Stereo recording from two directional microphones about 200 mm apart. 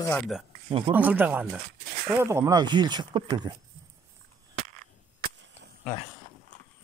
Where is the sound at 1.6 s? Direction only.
50° right (ahead or behind).